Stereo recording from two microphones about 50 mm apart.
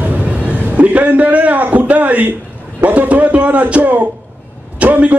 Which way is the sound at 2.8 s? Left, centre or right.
Right.